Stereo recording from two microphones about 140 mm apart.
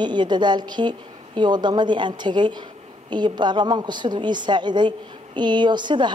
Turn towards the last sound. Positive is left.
turn(degrees=-35)  # may be behind; listen again after turning